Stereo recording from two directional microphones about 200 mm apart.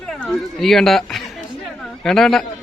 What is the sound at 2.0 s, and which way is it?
Speech, centre (ahead or behind).